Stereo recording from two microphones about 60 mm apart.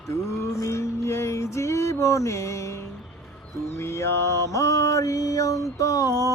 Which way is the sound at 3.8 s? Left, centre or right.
Left.